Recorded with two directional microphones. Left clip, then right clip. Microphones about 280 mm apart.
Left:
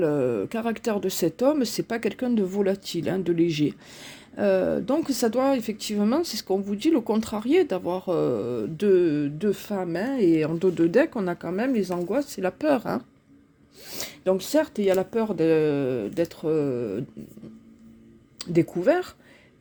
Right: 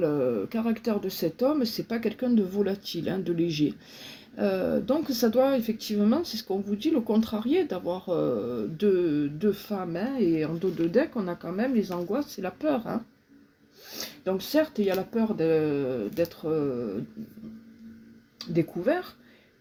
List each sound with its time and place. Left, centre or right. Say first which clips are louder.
0.0 s speech: left 2 dB; left
18.3 s speech: left 5 dB; left